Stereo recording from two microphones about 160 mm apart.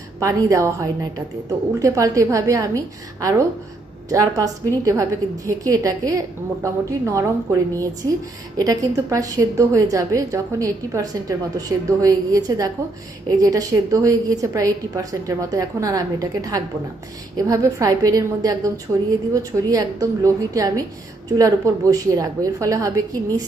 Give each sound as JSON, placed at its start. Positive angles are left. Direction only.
{"t": 0.2, "sound": "a woman's voice", "side_deg": -20}